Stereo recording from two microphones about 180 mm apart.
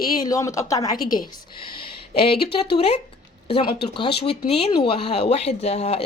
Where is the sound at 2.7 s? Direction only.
35° left (ahead or behind).